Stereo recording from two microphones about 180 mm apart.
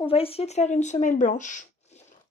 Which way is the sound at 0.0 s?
30° left (ahead or behind).